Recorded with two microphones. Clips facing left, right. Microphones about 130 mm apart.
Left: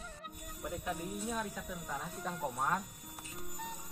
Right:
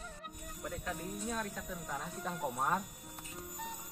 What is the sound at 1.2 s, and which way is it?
Speech, 5° left (ahead or behind).